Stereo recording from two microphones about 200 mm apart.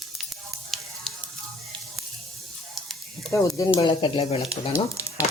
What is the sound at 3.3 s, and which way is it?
Speech, 15° left (ahead or behind).